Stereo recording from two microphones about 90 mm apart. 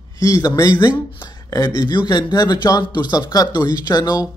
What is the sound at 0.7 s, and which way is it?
Speech, 60° left (ahead or behind).